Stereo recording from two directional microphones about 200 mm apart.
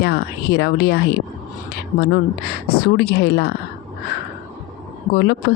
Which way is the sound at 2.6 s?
50° left (ahead or behind).